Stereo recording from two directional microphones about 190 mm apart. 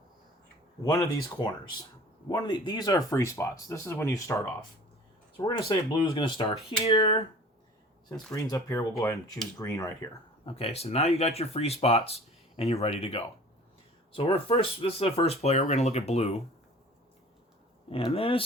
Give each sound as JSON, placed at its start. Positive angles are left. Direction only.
{"t": 0.8, "sound": "speech", "side_deg": 20}
{"t": 8.3, "sound": "speech", "side_deg": 15}
{"t": 10.4, "sound": "speech", "side_deg": 30}
{"t": 17.8, "sound": "speech", "side_deg": 30}